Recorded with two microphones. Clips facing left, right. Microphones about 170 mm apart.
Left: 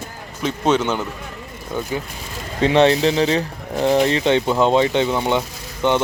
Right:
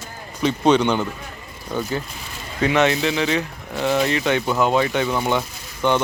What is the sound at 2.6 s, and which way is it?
Speech, 30° left (ahead or behind).